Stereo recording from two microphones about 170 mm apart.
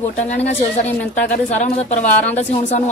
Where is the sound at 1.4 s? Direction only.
45° left (ahead or behind).